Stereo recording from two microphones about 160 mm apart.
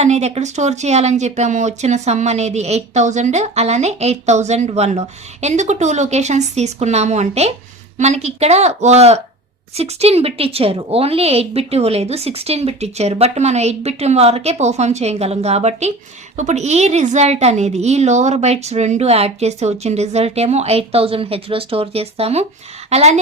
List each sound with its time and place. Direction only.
0.0 s a woman's voice: 45° right (ahead or behind)